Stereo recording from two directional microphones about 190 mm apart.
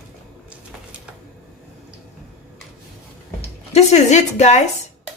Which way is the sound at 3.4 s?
35° left (ahead or behind).